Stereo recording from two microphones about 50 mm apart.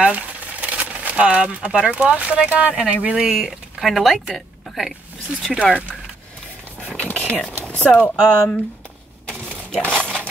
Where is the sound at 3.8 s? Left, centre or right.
Centre.